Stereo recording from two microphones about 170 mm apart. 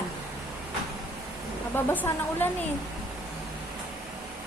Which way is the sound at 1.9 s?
15° left (ahead or behind).